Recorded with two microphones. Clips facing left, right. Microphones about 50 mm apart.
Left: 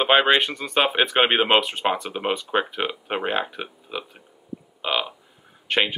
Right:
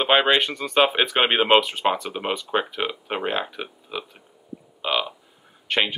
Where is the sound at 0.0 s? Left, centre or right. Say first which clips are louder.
Left 1 dB; centre.